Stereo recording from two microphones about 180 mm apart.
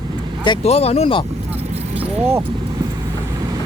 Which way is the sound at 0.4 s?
30° left (ahead or behind).